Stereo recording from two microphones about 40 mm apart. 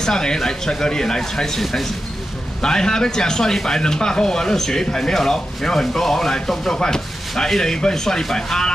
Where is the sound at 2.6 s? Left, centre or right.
Centre.